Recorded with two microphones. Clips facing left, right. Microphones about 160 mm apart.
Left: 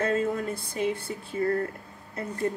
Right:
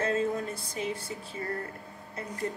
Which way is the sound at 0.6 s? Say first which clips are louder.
Left 5 dB; 60° left (ahead or behind).